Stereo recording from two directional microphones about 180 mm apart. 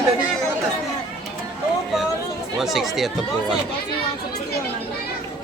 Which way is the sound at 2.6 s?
Centre (ahead or behind).